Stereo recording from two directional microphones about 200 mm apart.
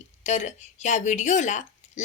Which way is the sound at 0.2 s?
35° left (ahead or behind).